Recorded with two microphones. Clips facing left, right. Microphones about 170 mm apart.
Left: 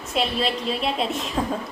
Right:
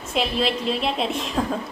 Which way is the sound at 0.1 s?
Centre (ahead or behind).